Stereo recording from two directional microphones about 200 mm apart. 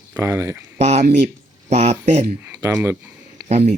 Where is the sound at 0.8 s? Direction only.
35° right (ahead or behind).